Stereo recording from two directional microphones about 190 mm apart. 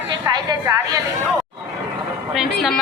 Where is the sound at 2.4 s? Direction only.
Centre (ahead or behind).